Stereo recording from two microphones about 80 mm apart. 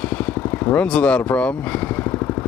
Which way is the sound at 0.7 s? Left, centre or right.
Centre.